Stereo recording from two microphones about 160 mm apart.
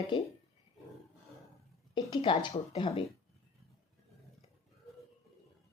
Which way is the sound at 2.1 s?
30° left (ahead or behind).